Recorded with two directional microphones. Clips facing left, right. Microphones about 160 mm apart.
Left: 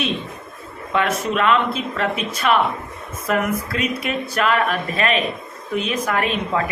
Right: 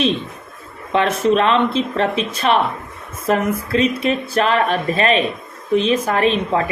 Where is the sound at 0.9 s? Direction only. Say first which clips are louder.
Right 5 dB; 30° right (ahead or behind).